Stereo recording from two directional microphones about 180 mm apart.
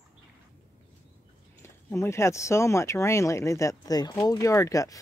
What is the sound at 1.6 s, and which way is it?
Speech, 15° left (ahead or behind).